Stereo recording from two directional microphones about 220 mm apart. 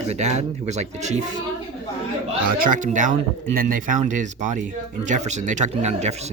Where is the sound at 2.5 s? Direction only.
35° right (ahead or behind).